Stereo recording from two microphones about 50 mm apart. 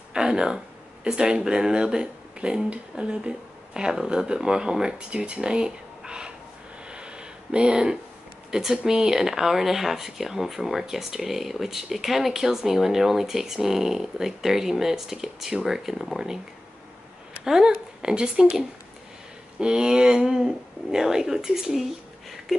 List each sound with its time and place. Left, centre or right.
0.1 s speech: centre
6.9 s a sound: centre
8.5 s speech: centre
17.5 s speech: centre